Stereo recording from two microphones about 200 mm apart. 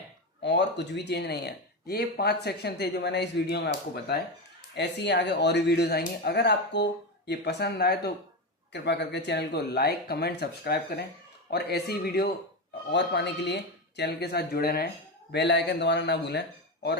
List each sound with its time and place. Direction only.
0.4 s a man's voice: 60° left (ahead or behind)